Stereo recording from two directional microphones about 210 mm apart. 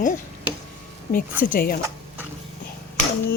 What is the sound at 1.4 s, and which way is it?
Speech, 40° left (ahead or behind).